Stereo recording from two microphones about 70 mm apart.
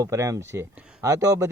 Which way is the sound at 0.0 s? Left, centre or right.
Right.